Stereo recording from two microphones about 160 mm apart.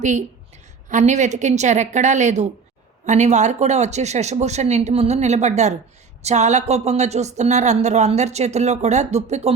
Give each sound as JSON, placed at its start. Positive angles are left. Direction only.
{"t": 0.0, "sound": "speech", "side_deg": -50}